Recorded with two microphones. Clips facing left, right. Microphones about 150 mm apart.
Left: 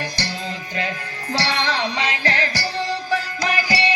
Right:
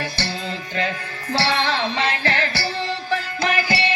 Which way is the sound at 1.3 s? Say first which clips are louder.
Right 2 dB; 40° left (ahead or behind).